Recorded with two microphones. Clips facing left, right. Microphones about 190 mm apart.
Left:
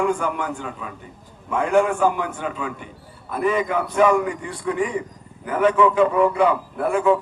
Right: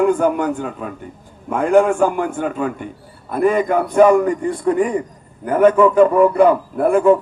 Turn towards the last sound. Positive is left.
turn(degrees=-45)  # may be behind; listen again after turning